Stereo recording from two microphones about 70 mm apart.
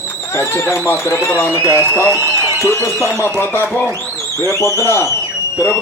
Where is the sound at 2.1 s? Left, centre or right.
Right.